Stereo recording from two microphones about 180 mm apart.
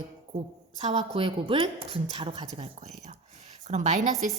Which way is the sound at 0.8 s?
35° right (ahead or behind).